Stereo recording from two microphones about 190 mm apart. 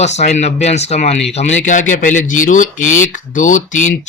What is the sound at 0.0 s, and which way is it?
Speech, 35° left (ahead or behind).